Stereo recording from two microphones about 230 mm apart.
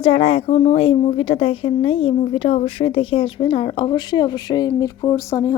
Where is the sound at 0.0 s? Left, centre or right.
Left.